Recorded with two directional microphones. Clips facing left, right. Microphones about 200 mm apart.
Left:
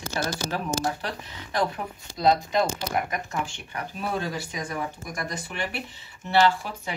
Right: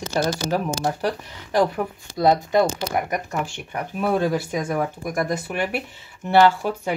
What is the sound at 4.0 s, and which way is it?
Speech, 55° right (ahead or behind).